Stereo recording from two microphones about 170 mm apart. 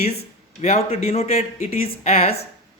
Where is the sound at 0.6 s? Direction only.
40° left (ahead or behind).